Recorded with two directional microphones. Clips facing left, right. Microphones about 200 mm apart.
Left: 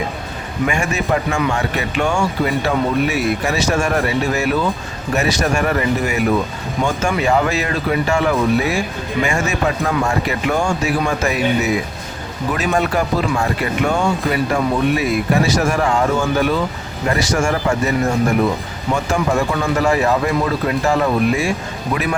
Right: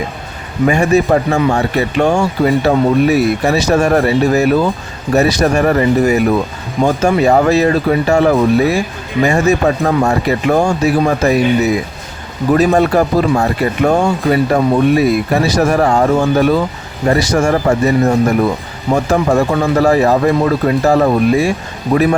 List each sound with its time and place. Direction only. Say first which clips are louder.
0.7 s speech: right 9 dB; 35° right (ahead or behind)